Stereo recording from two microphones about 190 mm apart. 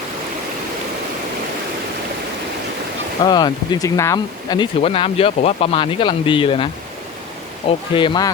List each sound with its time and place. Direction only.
3.2 s speech: 20° left (ahead or behind)
7.7 s speech: 25° left (ahead or behind)